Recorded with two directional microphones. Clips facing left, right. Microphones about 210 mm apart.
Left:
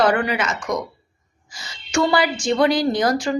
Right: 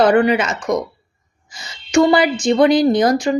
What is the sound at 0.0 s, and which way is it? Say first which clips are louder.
Speech: right 6 dB; 25° right (ahead or behind).